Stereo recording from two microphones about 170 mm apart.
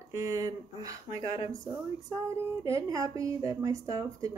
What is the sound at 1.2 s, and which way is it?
Speech, 30° left (ahead or behind).